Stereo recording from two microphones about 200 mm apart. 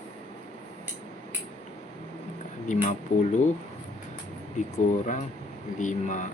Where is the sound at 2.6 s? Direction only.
35° left (ahead or behind).